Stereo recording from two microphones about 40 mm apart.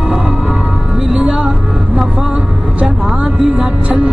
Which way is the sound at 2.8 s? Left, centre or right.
Centre.